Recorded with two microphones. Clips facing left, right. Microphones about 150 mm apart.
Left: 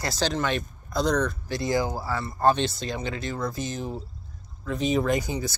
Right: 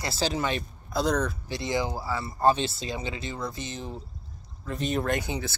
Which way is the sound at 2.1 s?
5° right (ahead or behind).